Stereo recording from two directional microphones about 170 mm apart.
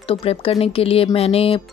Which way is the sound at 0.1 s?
35° left (ahead or behind).